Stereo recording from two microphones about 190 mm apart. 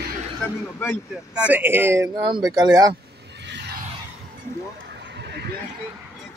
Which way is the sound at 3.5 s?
60° right (ahead or behind).